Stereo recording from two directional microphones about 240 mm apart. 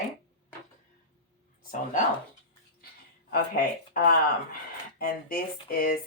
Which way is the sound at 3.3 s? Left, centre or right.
Left.